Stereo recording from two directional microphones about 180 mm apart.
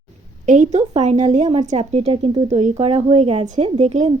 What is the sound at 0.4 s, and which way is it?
A woman's voice, 40° right (ahead or behind).